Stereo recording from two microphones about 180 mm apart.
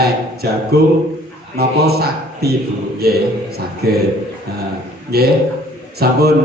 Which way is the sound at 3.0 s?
60° right (ahead or behind).